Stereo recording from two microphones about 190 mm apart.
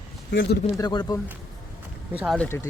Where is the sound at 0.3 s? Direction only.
70° left (ahead or behind).